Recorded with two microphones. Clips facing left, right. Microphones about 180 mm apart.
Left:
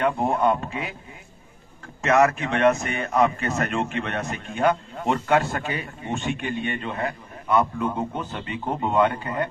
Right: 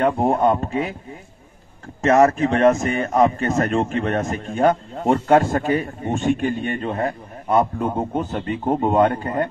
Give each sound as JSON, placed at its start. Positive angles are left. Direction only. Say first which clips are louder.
{"t": 0.0, "sound": "a man's voice", "louder": "right 4 dB", "side_deg": -40}
{"t": 2.0, "sound": "a man's voice", "louder": "right 5 dB", "side_deg": -40}